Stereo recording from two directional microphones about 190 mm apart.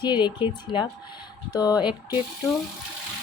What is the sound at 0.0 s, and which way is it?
Speech, 25° left (ahead or behind).